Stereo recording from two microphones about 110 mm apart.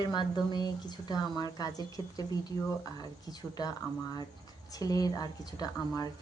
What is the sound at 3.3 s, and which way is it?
Speech, 35° left (ahead or behind).